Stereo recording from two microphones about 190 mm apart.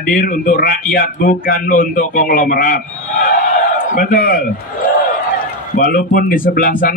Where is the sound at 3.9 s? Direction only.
45° left (ahead or behind).